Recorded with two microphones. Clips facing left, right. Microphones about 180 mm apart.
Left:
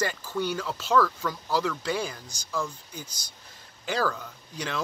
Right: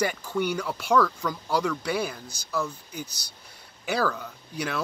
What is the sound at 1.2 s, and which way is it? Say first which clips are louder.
Speech: right 1 dB; 10° right (ahead or behind).